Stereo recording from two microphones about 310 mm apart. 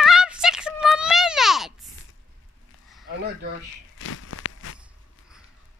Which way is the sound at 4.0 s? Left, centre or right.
Left.